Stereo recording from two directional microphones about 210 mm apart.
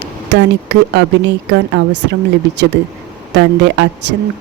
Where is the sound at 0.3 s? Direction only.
55° right (ahead or behind).